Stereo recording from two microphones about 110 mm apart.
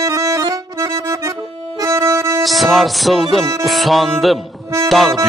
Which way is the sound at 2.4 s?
Centre (ahead or behind).